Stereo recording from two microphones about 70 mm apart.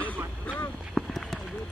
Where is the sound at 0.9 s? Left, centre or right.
Centre.